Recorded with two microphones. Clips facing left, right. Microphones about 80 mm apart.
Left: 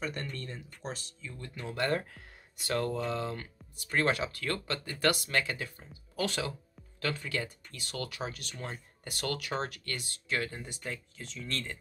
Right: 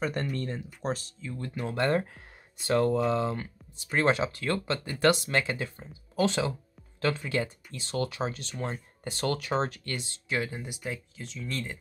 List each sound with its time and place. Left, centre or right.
0.0 s speech: right
1.2 s speech: right; by 11.8 s centre